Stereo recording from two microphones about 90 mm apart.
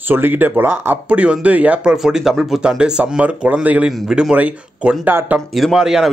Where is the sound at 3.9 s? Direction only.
5° right (ahead or behind); by 5.3 s 20° right (ahead or behind).